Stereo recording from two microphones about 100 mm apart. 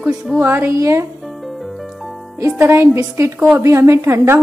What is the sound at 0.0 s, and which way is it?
A woman's voice, 20° right (ahead or behind).